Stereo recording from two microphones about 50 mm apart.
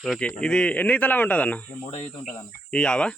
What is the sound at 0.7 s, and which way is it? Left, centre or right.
Speech, left.